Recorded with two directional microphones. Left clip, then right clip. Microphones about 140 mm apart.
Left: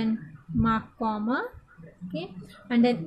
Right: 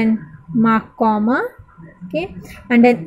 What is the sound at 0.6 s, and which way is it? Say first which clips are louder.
A woman's voice: right 11 dB; 30° right (ahead or behind).